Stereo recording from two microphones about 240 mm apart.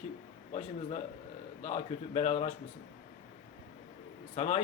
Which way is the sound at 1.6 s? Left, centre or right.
Left.